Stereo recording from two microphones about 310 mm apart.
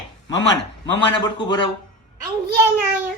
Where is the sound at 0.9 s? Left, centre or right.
Centre.